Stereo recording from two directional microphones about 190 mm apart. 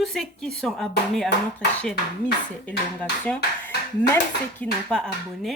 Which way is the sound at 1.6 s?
60° left (ahead or behind).